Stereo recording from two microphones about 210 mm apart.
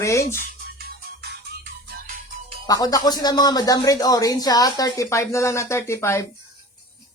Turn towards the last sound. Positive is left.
turn(degrees=15)  # may be behind; listen again after turning